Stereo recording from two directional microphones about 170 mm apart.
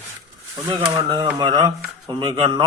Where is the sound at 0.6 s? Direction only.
25° right (ahead or behind).